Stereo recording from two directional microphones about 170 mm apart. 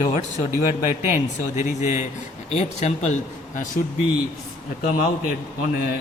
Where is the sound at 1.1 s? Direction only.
45° left (ahead or behind).